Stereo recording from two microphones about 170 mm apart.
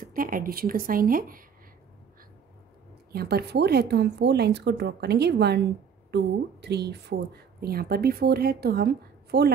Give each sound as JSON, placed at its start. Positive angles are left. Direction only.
{"t": 0.0, "sound": "a woman's voice", "side_deg": -55}
{"t": 3.1, "sound": "speech", "side_deg": -65}